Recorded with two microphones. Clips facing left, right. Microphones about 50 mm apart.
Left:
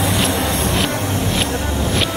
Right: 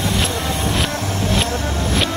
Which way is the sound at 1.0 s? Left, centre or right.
Centre.